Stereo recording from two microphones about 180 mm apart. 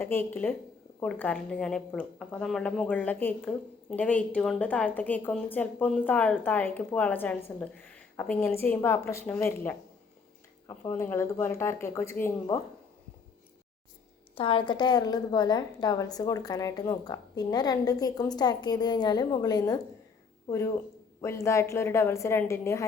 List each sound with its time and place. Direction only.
0.0 s speech: 10° left (ahead or behind)
14.3 s a woman's voice: 30° left (ahead or behind)